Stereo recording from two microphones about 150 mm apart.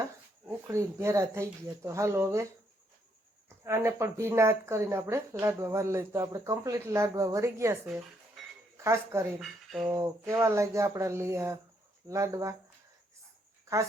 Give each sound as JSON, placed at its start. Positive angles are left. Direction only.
{"t": 0.4, "sound": "speech", "side_deg": -20}
{"t": 3.6, "sound": "speech", "side_deg": -20}
{"t": 8.8, "sound": "speech", "side_deg": -20}
{"t": 13.7, "sound": "a sound", "side_deg": -20}